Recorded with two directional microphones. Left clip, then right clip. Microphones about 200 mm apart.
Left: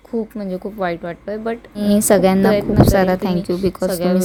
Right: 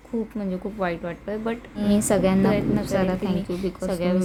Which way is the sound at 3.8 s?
20° left (ahead or behind).